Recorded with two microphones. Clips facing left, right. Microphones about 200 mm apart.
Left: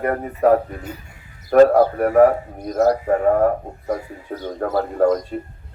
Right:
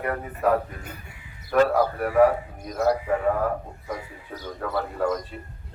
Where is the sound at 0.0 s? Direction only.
45° left (ahead or behind).